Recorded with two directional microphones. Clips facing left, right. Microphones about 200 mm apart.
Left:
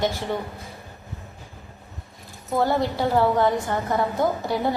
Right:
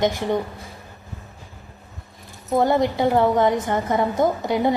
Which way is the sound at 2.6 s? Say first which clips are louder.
Right 3 dB; 20° right (ahead or behind).